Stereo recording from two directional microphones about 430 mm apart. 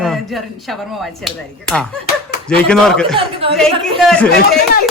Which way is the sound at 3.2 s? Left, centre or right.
Centre.